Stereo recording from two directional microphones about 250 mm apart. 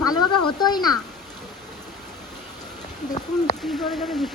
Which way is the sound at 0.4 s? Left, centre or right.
Centre.